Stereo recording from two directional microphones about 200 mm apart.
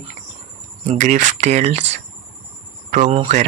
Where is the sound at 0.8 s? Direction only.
35° right (ahead or behind).